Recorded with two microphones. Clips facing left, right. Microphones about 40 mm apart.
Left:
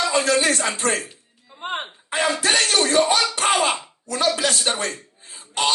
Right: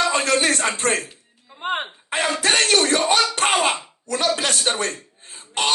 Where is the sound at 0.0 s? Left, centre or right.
Right.